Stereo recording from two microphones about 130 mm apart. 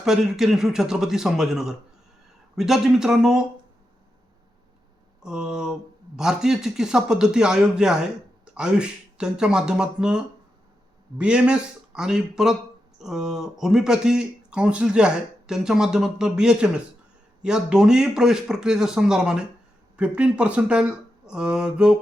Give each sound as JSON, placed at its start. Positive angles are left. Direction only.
{"t": 0.0, "sound": "speech", "side_deg": -5}
{"t": 5.2, "sound": "speech", "side_deg": -5}